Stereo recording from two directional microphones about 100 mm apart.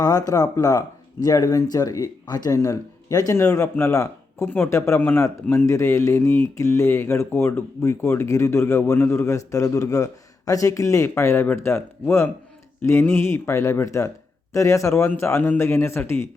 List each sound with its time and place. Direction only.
0.0 s speech: 40° left (ahead or behind)